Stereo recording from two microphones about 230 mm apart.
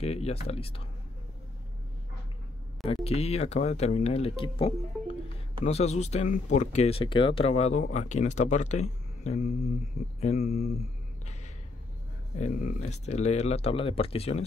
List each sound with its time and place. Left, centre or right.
0.0 s speech: left
2.8 s speech: left
12.4 s speech: left